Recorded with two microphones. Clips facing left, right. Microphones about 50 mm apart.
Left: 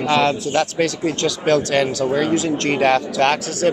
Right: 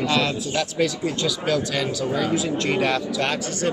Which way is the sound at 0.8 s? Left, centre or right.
Left.